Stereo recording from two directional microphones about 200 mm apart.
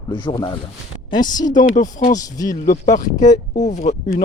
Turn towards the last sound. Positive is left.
turn(degrees=35)  # may be behind; listen again after turning